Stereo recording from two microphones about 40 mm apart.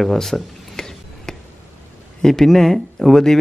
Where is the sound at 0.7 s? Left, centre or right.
Centre.